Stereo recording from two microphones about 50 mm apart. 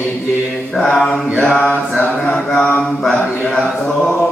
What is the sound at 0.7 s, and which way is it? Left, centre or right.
Mantra, centre.